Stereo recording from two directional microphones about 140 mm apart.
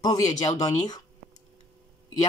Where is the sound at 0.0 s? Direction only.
25° left (ahead or behind).